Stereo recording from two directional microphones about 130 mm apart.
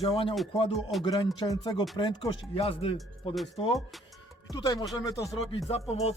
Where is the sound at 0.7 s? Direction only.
Centre (ahead or behind).